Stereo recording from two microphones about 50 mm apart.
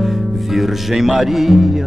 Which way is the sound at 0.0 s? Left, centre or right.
Centre.